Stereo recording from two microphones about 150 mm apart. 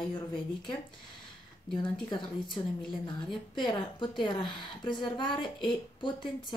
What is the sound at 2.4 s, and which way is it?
A woman's voice, 30° left (ahead or behind).